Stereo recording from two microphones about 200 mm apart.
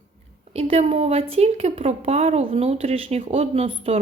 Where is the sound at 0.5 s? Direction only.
30° right (ahead or behind).